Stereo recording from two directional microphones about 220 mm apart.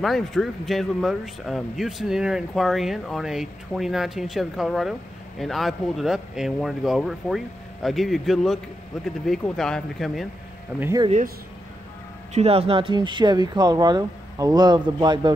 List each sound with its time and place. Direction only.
0.0 s speech: centre (ahead or behind)
10.8 s speech: 15° right (ahead or behind)
11.1 s speech: 35° right (ahead or behind)